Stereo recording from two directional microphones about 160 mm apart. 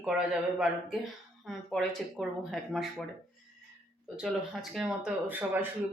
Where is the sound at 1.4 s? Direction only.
Centre (ahead or behind).